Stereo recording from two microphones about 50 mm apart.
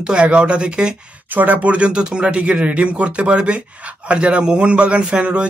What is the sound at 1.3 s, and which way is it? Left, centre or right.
Speech, right.